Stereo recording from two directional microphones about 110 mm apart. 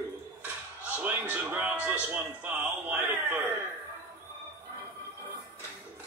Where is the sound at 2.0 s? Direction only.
15° right (ahead or behind).